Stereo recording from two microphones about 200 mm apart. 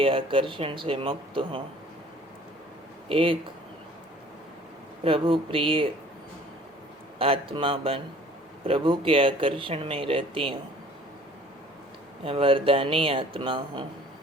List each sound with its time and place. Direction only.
0.0 s speech: 25° right (ahead or behind)
3.1 s speech: 25° right (ahead or behind)
5.0 s speech: 25° right (ahead or behind)
7.2 s speech: 25° right (ahead or behind)
12.2 s speech: 25° right (ahead or behind)